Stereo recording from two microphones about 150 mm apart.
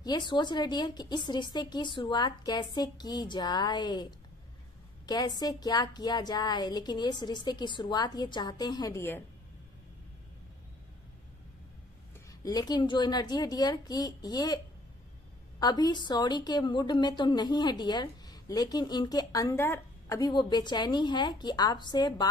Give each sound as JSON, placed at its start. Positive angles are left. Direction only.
{"t": 0.0, "sound": "a woman's voice", "side_deg": 30}
{"t": 12.3, "sound": "a woman's voice", "side_deg": 25}
{"t": 15.6, "sound": "a woman's voice", "side_deg": 25}